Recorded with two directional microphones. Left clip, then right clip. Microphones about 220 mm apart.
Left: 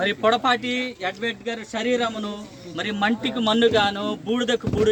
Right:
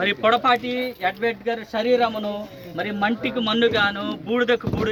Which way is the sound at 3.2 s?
30° left (ahead or behind).